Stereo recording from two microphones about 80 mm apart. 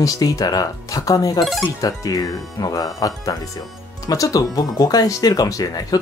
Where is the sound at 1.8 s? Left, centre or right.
Left.